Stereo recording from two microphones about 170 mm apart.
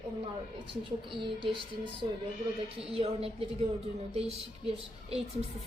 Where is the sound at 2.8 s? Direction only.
35° right (ahead or behind).